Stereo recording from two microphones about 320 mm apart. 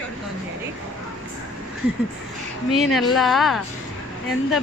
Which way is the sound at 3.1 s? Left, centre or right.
Centre.